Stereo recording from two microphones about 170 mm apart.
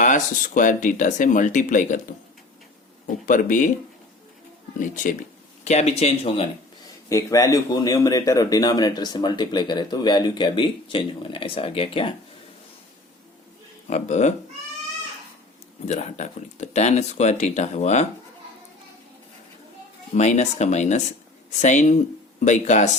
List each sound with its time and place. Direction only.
0.0 s speech: 50° left (ahead or behind)
3.2 s speech: 50° left (ahead or behind)
5.6 s speech: 40° left (ahead or behind)
7.1 s a man's voice: 20° left (ahead or behind)
13.9 s speech: 45° left (ahead or behind)
15.9 s speech: 40° left (ahead or behind)
20.1 s speech: 40° left (ahead or behind)